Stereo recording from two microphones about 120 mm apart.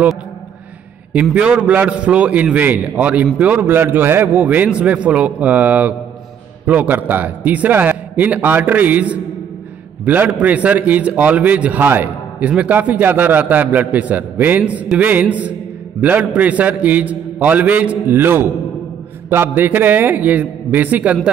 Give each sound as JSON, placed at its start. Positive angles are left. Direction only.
{"t": 1.3, "sound": "a man's voice", "side_deg": -10}